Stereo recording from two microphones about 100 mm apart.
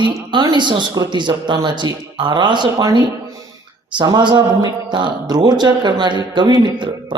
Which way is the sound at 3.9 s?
50° right (ahead or behind).